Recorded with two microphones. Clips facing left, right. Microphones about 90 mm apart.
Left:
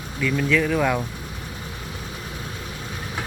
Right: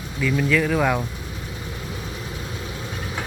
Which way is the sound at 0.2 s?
5° right (ahead or behind).